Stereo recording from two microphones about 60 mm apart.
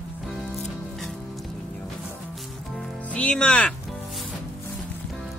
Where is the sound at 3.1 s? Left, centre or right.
Left.